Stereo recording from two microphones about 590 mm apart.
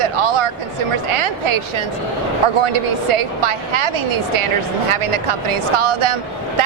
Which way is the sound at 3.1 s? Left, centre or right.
Right.